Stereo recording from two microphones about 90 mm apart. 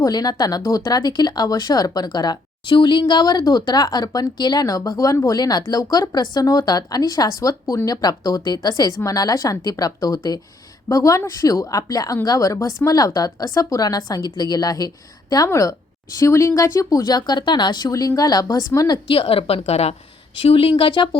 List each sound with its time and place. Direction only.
0.0 s a woman's voice: 45° left (ahead or behind)
19.0 s a woman's voice: 85° left; by 21.2 s 65° left (ahead or behind)